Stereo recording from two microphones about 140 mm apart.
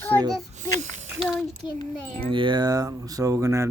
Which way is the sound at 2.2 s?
35° right (ahead or behind).